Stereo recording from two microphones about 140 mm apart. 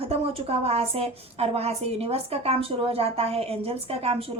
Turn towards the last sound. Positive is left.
turn(degrees=-45)  # may be behind; listen again after turning